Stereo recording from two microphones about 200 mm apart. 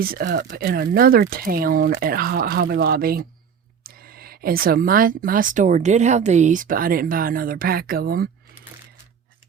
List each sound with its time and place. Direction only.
0.0 s speech: 50° right (ahead or behind)